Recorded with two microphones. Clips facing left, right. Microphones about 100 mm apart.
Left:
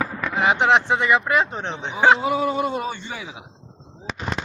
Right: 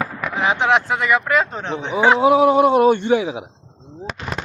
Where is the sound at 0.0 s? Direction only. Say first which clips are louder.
Right 1 dB; 10° right (ahead or behind).